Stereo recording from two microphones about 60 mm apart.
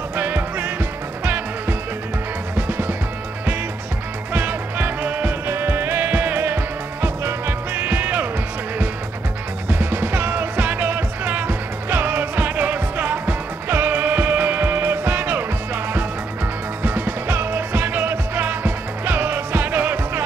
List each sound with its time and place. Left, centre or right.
0.1 s music: right
4.3 s music: right
5.5 s music: right
9.7 s music: right